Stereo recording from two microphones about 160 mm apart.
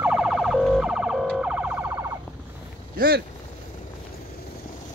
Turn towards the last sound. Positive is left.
turn(degrees=-70)  # may be behind; listen again after turning